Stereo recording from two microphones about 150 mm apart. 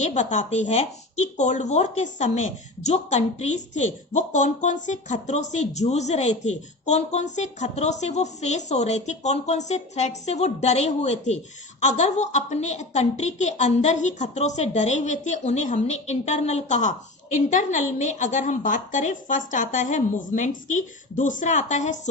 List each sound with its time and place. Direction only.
0.0 s a woman's voice: 50° left (ahead or behind)